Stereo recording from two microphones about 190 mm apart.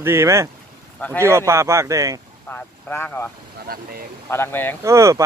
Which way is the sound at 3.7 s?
55° right (ahead or behind).